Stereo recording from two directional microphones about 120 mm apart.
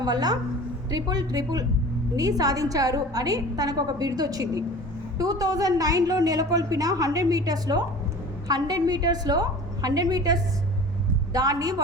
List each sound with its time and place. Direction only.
0.0 s a woman's voice: 35° right (ahead or behind)